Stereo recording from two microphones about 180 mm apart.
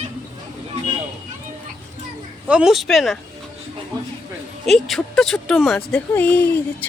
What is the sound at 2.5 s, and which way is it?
Speech, 5° right (ahead or behind).